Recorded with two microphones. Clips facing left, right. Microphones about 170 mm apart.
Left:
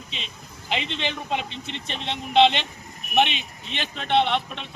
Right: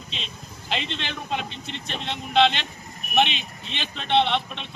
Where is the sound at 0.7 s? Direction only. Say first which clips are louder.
Left 2 dB; 10° left (ahead or behind).